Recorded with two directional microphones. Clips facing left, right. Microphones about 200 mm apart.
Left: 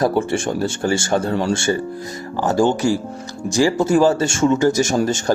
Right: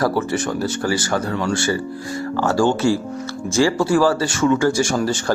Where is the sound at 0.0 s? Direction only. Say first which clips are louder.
Left 2 dB; 25° left (ahead or behind).